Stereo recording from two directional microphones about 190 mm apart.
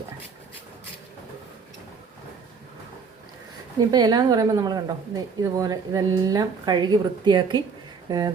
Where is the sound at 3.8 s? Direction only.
20° right (ahead or behind).